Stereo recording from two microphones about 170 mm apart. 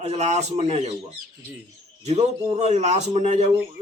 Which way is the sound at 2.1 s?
40° right (ahead or behind).